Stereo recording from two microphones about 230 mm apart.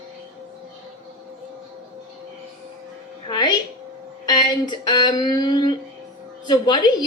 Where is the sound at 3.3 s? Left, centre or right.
Centre.